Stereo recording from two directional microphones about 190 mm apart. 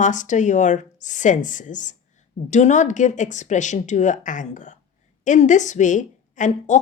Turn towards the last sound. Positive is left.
turn(degrees=40)  # may be behind; listen again after turning